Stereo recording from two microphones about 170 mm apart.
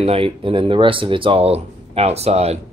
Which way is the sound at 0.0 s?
35° right (ahead or behind).